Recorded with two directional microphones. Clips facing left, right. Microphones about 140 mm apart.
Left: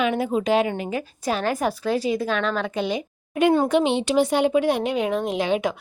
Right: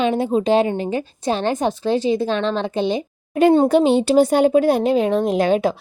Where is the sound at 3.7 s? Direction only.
40° right (ahead or behind).